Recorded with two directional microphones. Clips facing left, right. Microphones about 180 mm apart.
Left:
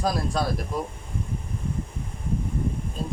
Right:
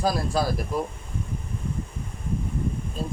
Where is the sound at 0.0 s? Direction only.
Centre (ahead or behind).